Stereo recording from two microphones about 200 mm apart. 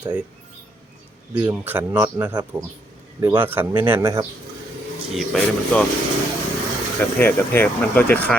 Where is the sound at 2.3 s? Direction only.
20° right (ahead or behind).